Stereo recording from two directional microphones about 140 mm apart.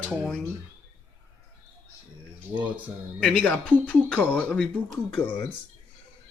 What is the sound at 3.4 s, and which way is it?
Speech, 10° left (ahead or behind).